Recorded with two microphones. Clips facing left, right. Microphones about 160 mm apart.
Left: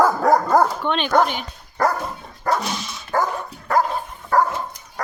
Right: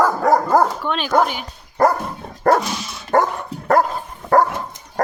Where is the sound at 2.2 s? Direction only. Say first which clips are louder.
Right 8 dB; 55° right (ahead or behind).